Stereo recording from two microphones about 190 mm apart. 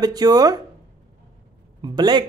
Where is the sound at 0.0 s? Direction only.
20° right (ahead or behind).